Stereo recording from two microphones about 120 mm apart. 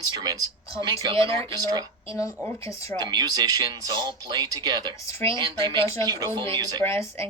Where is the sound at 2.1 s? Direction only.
30° left (ahead or behind).